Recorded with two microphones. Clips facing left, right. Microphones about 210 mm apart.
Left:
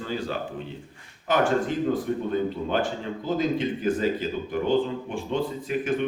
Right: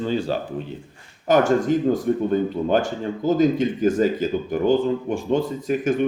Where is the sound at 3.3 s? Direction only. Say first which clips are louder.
Right 7 dB; 45° right (ahead or behind).